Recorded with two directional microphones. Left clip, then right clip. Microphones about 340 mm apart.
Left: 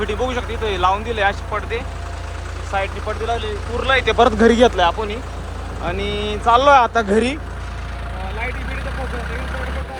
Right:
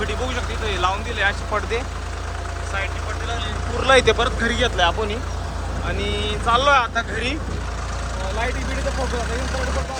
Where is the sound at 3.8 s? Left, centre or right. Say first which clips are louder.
Left 1 dB; centre.